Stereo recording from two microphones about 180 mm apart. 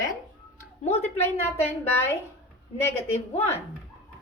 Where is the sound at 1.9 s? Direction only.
15° left (ahead or behind).